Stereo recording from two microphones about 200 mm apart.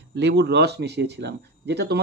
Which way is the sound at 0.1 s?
60° right (ahead or behind).